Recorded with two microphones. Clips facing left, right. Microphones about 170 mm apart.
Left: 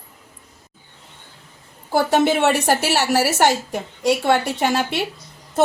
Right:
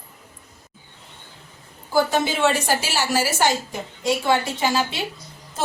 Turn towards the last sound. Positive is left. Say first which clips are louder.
# left 2 dB
turn(degrees=65)  # may be behind; listen again after turning